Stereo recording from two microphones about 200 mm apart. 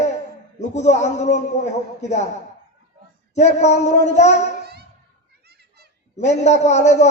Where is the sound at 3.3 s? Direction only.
35° left (ahead or behind).